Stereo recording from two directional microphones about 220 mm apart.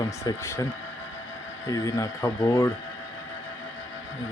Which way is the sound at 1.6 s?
15° left (ahead or behind).